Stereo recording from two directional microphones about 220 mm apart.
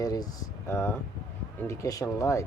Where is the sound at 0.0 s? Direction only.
15° left (ahead or behind).